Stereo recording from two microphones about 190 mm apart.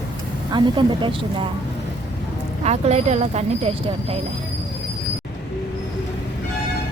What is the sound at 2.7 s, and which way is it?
Speech, 35° right (ahead or behind).